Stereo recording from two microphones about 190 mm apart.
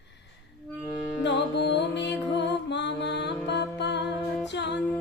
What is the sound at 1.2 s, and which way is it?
Music, 65° left (ahead or behind).